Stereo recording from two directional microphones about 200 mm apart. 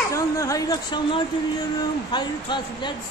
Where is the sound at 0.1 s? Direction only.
15° left (ahead or behind).